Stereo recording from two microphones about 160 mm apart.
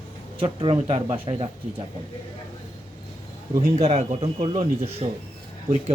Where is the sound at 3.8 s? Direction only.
40° right (ahead or behind).